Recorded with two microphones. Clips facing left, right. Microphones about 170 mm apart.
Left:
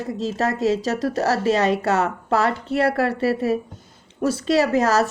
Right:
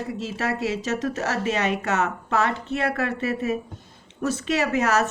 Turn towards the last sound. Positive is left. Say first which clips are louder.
# left 4 dB
turn(degrees=35)  # may be behind; listen again after turning